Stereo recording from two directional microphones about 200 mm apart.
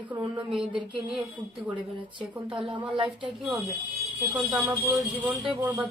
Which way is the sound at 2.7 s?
25° right (ahead or behind).